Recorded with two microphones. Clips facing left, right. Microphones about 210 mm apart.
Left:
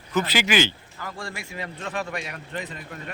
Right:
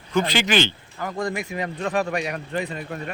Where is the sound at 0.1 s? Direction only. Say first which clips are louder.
Right 2 dB; 5° left (ahead or behind).